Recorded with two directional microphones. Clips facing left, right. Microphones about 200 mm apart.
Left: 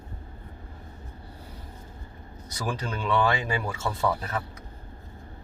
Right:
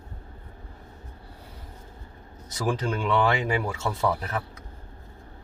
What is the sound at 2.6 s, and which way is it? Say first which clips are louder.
Speech: right 3 dB; 20° right (ahead or behind).